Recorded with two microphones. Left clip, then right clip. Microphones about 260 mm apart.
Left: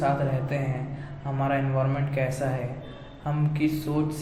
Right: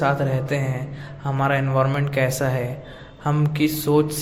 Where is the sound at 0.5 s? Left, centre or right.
Right.